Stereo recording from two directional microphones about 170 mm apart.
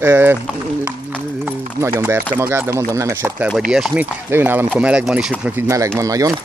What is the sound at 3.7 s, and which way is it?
Speech, 5° right (ahead or behind).